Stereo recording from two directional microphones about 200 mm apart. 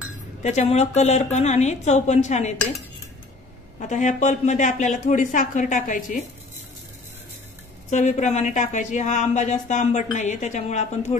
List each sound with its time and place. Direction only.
0.4 s speech: 35° left (ahead or behind)
3.8 s speech: 40° left (ahead or behind)
7.9 s speech: 35° left (ahead or behind)